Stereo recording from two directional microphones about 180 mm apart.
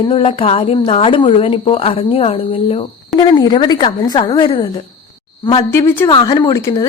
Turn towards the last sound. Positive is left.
turn(degrees=20)  # may be behind; listen again after turning